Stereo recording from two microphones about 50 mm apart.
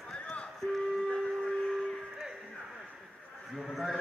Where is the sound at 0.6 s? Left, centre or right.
Centre.